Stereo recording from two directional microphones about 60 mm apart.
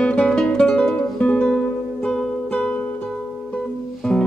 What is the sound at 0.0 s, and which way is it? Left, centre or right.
Music, centre.